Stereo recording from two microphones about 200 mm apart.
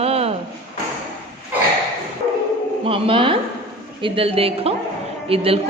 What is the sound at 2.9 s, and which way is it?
A woman's voice, 25° right (ahead or behind).